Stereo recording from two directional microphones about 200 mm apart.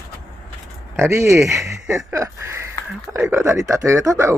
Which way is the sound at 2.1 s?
15° right (ahead or behind).